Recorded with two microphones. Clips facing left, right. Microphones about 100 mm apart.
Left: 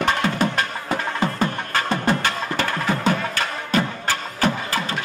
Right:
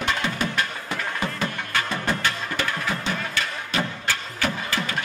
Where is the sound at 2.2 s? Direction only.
50° left (ahead or behind).